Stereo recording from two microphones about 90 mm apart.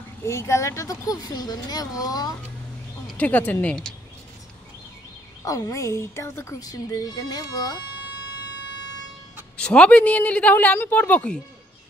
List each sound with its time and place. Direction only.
0.2 s speech: 30° left (ahead or behind)
3.2 s speech: 20° left (ahead or behind)
5.4 s a woman's voice: 40° left (ahead or behind)
6.6 s speech: 45° left (ahead or behind)
9.6 s a woman's voice: 10° left (ahead or behind)